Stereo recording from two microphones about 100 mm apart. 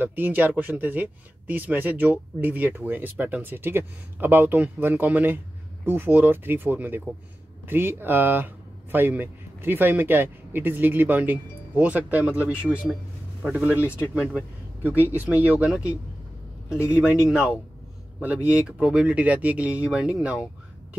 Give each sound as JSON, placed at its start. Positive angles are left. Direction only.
{"t": 0.0, "sound": "speech", "side_deg": -20}
{"t": 14.8, "sound": "speech", "side_deg": -20}